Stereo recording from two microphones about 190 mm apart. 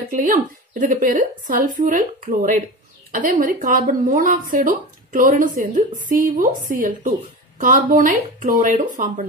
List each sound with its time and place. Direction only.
0.1 s speech: 45° right (ahead or behind)